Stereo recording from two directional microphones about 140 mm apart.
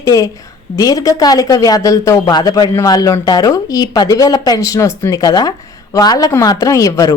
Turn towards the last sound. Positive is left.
turn(degrees=25)  # may be behind; listen again after turning